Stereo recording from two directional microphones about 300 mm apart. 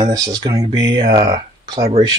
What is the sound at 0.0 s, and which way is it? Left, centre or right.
Speech, centre.